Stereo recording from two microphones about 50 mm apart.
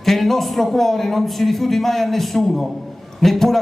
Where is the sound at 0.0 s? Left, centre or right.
Centre.